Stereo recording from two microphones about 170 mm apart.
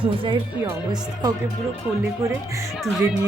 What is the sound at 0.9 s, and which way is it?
Speech, 25° right (ahead or behind).